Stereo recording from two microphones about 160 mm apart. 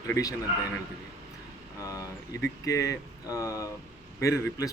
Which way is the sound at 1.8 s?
20° left (ahead or behind).